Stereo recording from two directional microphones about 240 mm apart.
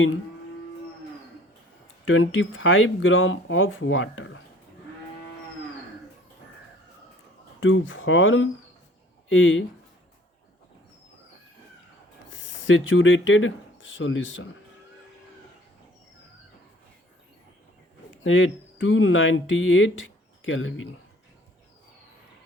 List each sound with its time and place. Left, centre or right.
2.0 s speech: left
7.6 s speech: left
12.6 s speech: left
18.1 s speech: left